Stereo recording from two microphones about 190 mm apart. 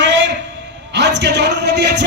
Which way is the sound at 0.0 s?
70° right (ahead or behind).